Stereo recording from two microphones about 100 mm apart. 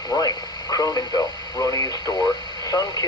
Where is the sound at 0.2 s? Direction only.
40° left (ahead or behind).